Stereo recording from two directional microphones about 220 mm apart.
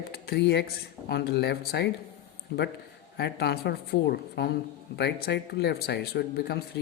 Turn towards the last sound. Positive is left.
turn(degrees=50)  # may be behind; listen again after turning